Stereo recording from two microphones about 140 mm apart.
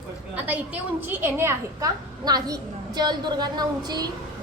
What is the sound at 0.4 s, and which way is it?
A woman's voice, 10° right (ahead or behind).